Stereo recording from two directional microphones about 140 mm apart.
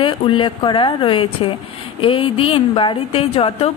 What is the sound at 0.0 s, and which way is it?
A woman's voice, 35° left (ahead or behind).